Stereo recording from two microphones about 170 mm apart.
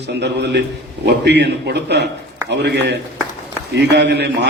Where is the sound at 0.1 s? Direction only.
85° right.